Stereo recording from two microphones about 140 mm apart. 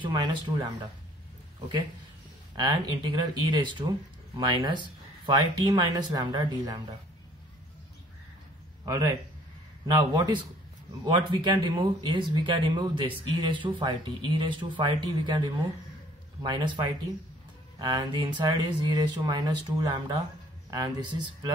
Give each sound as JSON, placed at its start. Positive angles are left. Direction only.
{"t": 0.0, "sound": "speech", "side_deg": -30}
{"t": 2.5, "sound": "speech", "side_deg": -30}
{"t": 5.2, "sound": "speech", "side_deg": -30}
{"t": 8.8, "sound": "speech", "side_deg": -25}